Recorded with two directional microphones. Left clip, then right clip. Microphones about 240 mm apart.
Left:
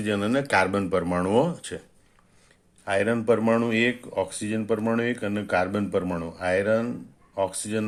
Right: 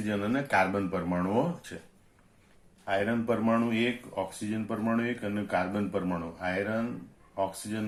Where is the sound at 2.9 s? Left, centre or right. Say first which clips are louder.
Left 6 dB; left.